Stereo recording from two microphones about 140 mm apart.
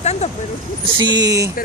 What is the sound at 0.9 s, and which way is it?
Speech, 30° right (ahead or behind).